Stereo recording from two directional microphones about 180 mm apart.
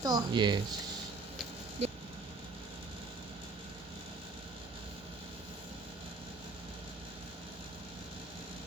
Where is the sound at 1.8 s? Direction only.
35° right (ahead or behind).